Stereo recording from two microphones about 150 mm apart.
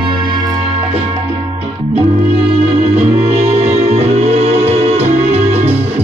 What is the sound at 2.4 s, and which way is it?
Music, 40° right (ahead or behind).